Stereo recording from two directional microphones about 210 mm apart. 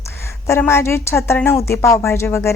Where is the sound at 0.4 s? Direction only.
10° left (ahead or behind).